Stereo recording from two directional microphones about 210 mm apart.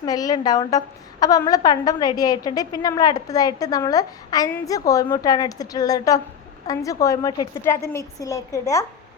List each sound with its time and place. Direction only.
0.0 s a woman's voice: 20° left (ahead or behind)